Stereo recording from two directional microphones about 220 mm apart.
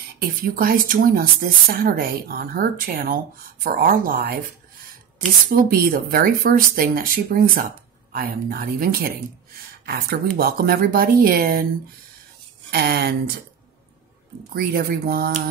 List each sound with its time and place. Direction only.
0.2 s speech: 40° right (ahead or behind)
5.5 s speech: 40° right (ahead or behind)
12.7 s speech: 45° right (ahead or behind)
14.5 s speech: 45° right (ahead or behind)